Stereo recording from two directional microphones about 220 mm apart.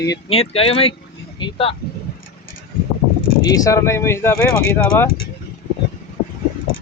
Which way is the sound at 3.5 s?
15° left (ahead or behind).